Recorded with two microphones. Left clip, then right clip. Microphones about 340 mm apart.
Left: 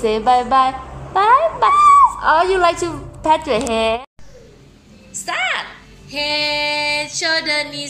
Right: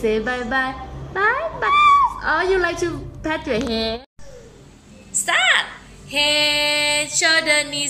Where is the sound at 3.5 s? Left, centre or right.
Left.